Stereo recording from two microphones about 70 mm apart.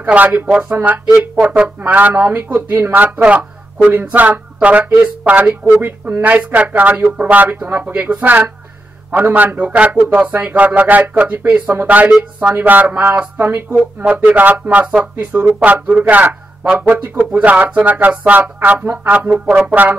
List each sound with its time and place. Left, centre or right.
0.0 s speech: right